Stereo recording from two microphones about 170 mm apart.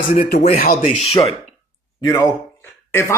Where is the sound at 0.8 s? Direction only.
35° left (ahead or behind).